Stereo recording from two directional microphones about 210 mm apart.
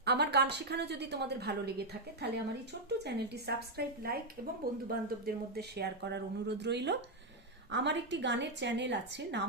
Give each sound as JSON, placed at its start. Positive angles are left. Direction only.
{"t": 0.0, "sound": "a woman's voice", "side_deg": -50}